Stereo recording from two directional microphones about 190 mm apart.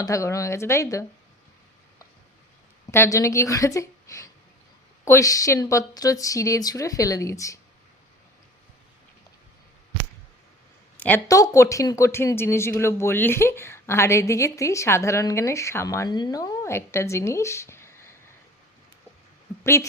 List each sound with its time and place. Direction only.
0.0 s speech: 15° left (ahead or behind)
2.9 s speech: 15° left (ahead or behind)
10.9 s speech: 10° left (ahead or behind)